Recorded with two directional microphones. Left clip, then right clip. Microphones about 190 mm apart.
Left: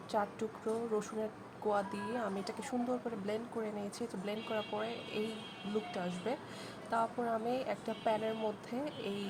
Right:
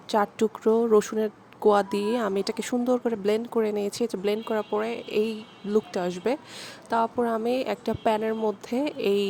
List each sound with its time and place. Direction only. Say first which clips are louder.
0.1 s a woman's voice: right 12 dB; 45° right (ahead or behind)